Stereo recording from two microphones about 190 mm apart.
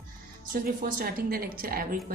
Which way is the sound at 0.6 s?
50° right (ahead or behind).